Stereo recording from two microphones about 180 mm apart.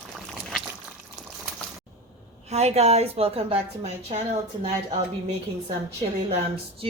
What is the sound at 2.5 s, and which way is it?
Speech, 35° right (ahead or behind).